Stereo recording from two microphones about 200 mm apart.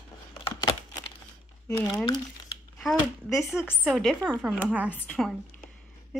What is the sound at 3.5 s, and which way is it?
A woman's voice, 5° right (ahead or behind).